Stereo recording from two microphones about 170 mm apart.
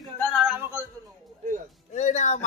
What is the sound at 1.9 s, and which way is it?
Speech, 45° left (ahead or behind).